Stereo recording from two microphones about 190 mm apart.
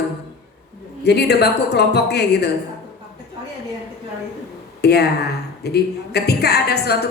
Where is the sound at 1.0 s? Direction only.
60° left (ahead or behind).